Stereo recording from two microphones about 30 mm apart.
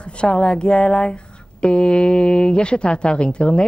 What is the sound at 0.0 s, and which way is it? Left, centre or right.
A woman's voice, left.